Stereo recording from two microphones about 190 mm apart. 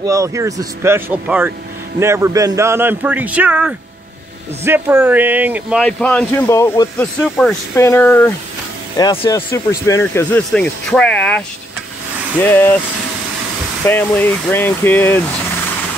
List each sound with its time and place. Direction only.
0.0 s a man's voice: 15° right (ahead or behind); by 7.1 s 15° left (ahead or behind)
7.2 s speech: 5° left (ahead or behind)
7.7 s speech: 15° left (ahead or behind)
8.9 s speech: 25° left (ahead or behind)
13.8 s speech: 10° left (ahead or behind)